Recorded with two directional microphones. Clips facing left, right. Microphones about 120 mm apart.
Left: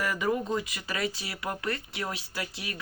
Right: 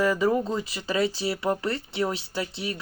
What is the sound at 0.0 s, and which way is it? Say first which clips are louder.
Speech: right 6 dB; 30° right (ahead or behind).